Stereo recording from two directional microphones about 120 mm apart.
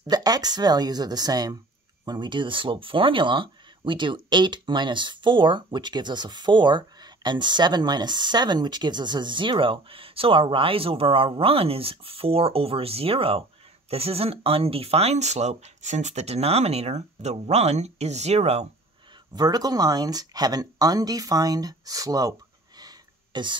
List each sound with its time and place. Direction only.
0.0 s speech: 35° right (ahead or behind); by 18.7 s 65° right (ahead or behind)
19.3 s speech: 35° right (ahead or behind)
22.8 s a sound: 35° right (ahead or behind)